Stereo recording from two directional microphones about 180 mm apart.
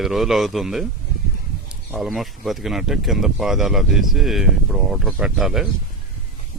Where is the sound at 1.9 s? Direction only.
Centre (ahead or behind).